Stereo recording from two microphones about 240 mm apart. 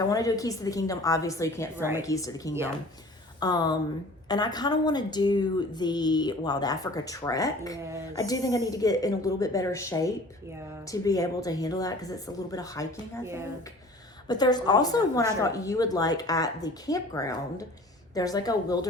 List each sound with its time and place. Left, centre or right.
0.0 s a woman's voice: centre
13.2 s speech: centre
14.3 s a woman's voice: centre